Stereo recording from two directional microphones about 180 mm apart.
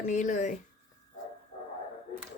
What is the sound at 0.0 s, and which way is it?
Speech, 45° left (ahead or behind).